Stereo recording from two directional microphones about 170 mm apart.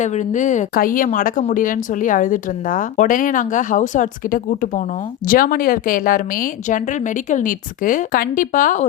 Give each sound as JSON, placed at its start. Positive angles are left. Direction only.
{"t": 0.0, "sound": "speech", "side_deg": 45}